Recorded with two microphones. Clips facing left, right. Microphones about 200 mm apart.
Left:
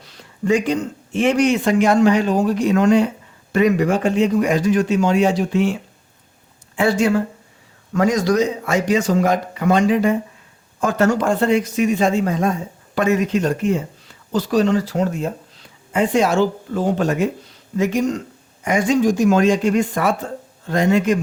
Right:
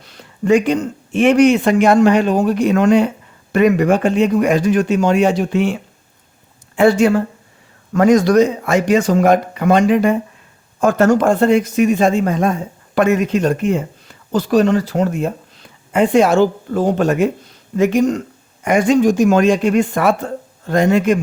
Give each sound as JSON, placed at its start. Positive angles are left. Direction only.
{"t": 0.4, "sound": "a man's voice", "side_deg": -60}
{"t": 6.7, "sound": "a man's voice", "side_deg": -55}
{"t": 20.7, "sound": "speech", "side_deg": -50}